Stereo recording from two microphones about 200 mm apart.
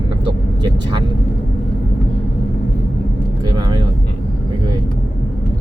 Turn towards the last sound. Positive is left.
turn(degrees=-20)  # may be behind; listen again after turning